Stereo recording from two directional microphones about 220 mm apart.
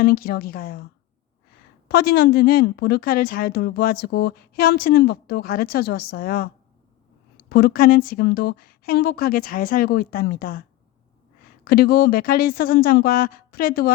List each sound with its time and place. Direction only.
0.0 s a woman's voice: 40° left (ahead or behind)
1.9 s a woman's voice: 45° left (ahead or behind)
7.5 s a woman's voice: 40° left (ahead or behind)
11.6 s a woman's voice: 45° left (ahead or behind)